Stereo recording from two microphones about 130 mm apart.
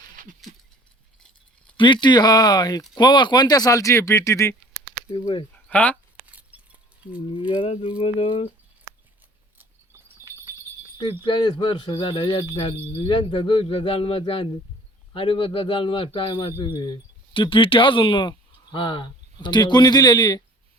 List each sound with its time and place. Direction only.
1.7 s speech: 40° left (ahead or behind); by 4.5 s 20° left (ahead or behind)
5.2 s speech: 45° left (ahead or behind)
5.6 s speech: 10° left (ahead or behind)
6.5 s a sound: 10° right (ahead or behind)
7.3 s speech: 40° left (ahead or behind)
11.2 s speech: 35° left (ahead or behind)